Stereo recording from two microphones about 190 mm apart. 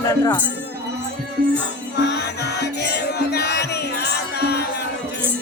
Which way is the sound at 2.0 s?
65° left (ahead or behind).